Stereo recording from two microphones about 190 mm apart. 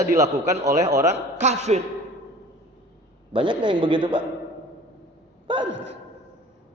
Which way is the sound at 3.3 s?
25° right (ahead or behind).